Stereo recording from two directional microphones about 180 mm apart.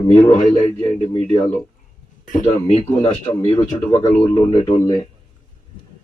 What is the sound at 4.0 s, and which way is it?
Speech, 25° left (ahead or behind).